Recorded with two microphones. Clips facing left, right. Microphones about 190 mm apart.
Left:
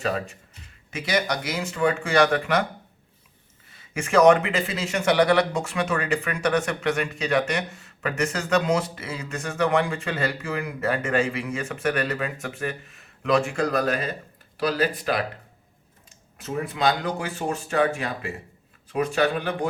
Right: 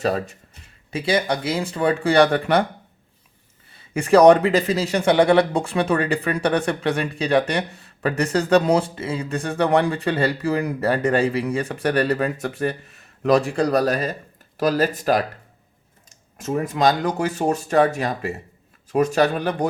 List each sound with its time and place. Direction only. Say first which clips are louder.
0.0 s speech: right 5 dB; 35° right (ahead or behind)
3.7 s speech: right 8 dB; 35° right (ahead or behind)